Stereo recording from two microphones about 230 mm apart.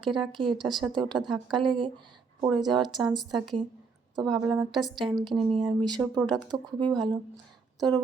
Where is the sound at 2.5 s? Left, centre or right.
Centre.